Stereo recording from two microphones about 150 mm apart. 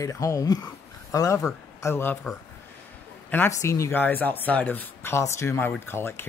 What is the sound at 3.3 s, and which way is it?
Speech, 15° left (ahead or behind).